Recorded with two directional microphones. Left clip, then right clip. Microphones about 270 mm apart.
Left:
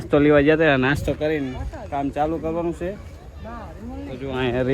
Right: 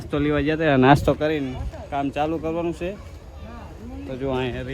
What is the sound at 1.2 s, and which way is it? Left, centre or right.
Speech, centre.